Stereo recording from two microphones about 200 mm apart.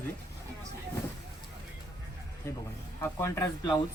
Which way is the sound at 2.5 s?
10° left (ahead or behind).